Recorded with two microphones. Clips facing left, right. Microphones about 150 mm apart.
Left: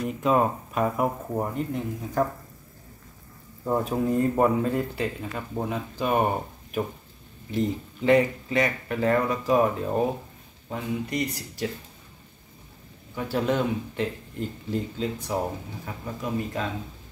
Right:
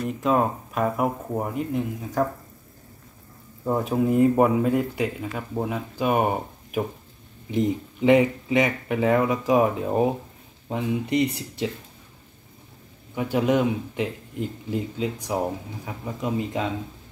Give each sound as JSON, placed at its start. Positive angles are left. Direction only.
{"t": 0.0, "sound": "speech", "side_deg": 0}
{"t": 3.7, "sound": "speech", "side_deg": 0}
{"t": 7.5, "sound": "speech", "side_deg": -15}
{"t": 10.7, "sound": "speech", "side_deg": -25}
{"t": 13.1, "sound": "speech", "side_deg": -15}